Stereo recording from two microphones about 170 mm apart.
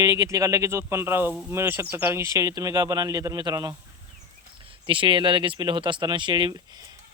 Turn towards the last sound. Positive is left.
turn(degrees=-25)  # may be behind; listen again after turning